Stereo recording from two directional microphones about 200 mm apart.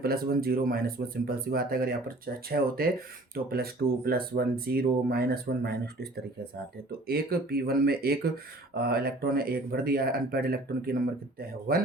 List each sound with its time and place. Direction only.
0.0 s speech: 50° right (ahead or behind)